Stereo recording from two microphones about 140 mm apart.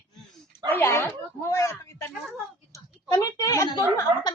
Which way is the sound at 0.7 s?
20° left (ahead or behind).